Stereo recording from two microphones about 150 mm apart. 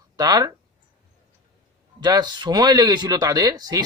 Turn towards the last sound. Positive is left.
turn(degrees=-25)  # may be behind; listen again after turning